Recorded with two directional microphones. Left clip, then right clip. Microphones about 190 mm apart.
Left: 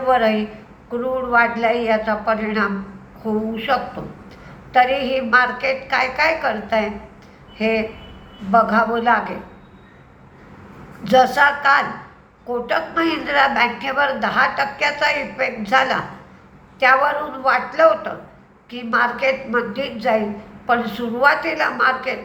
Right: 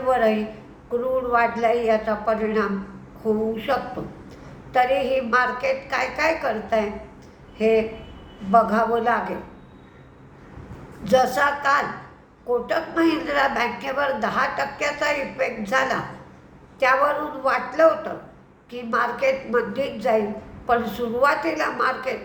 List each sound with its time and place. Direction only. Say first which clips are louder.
0.1 s a woman's voice: left 3 dB; 15° right (ahead or behind)
11.0 s a woman's voice: left 5 dB; 15° right (ahead or behind)